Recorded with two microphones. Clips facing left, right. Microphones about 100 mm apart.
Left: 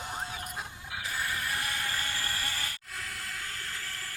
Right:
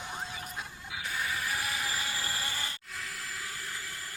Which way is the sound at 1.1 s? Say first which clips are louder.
Even; centre (ahead or behind).